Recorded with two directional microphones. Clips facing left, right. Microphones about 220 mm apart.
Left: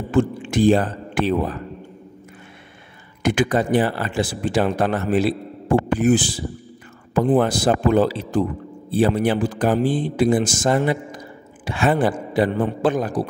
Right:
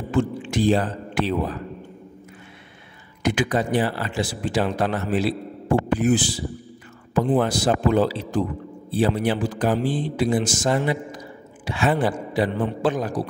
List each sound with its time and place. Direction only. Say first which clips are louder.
0.1 s speech: left 3 dB; 50° left (ahead or behind)
3.2 s speech: left 3 dB; 50° left (ahead or behind)